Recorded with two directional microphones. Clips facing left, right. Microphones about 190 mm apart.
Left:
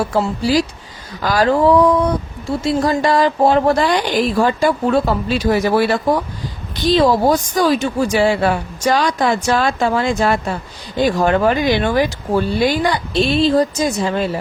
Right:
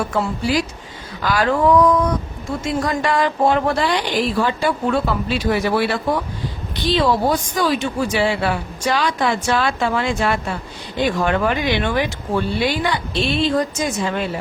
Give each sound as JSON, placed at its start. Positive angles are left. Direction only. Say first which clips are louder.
{"t": 0.0, "sound": "a woman's voice", "louder": "left 3 dB", "side_deg": 35}